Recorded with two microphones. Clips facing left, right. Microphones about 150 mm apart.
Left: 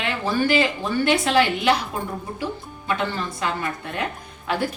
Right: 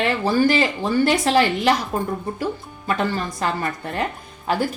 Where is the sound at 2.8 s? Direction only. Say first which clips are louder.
Right 3 dB; 40° right (ahead or behind).